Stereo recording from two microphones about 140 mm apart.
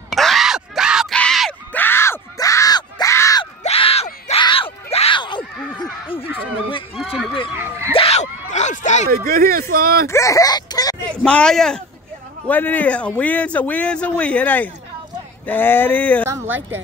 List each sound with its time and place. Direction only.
0.1 s groan: centre (ahead or behind)
1.1 s a sound: 5° left (ahead or behind)
1.7 s yell: 15° left (ahead or behind)
3.6 s a sound: 45° left (ahead or behind)
4.9 s screaming: 40° left (ahead or behind)
7.0 s a sound: 5° right (ahead or behind)
7.5 s speech: 15° right (ahead or behind)
7.9 s screaming: 45° left (ahead or behind)
9.1 s speech: 90° right
10.0 s speech: 20° left (ahead or behind)
11.1 s a man's voice: 10° left (ahead or behind)
16.3 s speech: 15° right (ahead or behind)